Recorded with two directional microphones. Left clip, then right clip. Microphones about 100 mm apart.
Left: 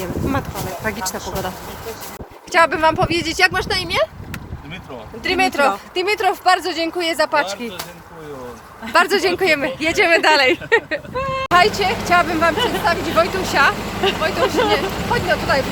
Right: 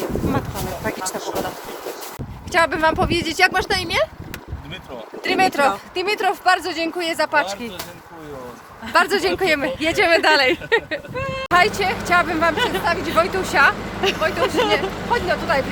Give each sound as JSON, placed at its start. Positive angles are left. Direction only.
{"t": 2.5, "sound": "speech", "side_deg": -20}
{"t": 3.5, "sound": "speech", "side_deg": -35}
{"t": 5.2, "sound": "speech", "side_deg": -10}
{"t": 5.9, "sound": "speech", "side_deg": 20}
{"t": 8.8, "sound": "speech", "side_deg": 5}
{"t": 11.2, "sound": "a sound", "side_deg": 0}
{"t": 11.5, "sound": "speech", "side_deg": -10}